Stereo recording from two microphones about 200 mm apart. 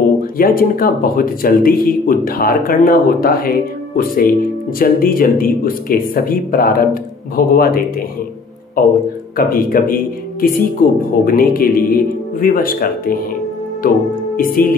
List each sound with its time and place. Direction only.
0.4 s speech: 45° left (ahead or behind)
9.4 s speech: 45° left (ahead or behind)
13.8 s music: 45° left (ahead or behind)